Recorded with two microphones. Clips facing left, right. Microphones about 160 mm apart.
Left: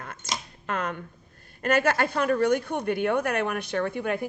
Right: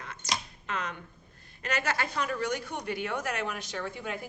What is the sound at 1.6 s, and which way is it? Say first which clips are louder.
Speech: left 8 dB; 55° left (ahead or behind).